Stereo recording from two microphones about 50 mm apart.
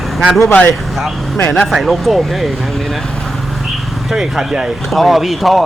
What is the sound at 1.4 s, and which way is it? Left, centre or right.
Speech, left.